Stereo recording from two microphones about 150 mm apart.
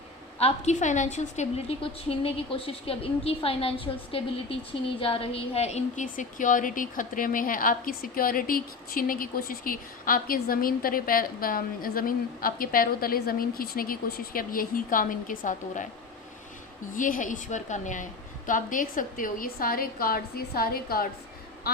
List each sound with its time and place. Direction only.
0.3 s a woman's voice: 45° left (ahead or behind)
16.9 s a woman's voice: 60° left (ahead or behind); by 21.1 s 80° left